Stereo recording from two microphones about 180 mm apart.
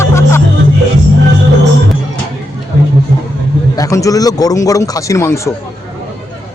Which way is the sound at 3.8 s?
20° left (ahead or behind).